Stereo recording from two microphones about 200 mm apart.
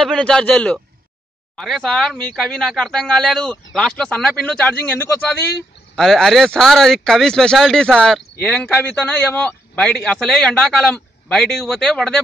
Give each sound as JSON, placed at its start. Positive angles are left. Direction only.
{"t": 0.0, "sound": "speech", "side_deg": 5}